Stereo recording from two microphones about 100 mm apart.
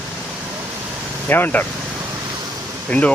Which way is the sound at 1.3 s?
20° left (ahead or behind).